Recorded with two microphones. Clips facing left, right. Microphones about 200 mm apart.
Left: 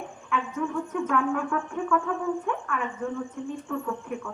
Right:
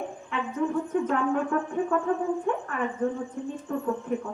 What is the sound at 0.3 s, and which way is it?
Speech, 35° right (ahead or behind).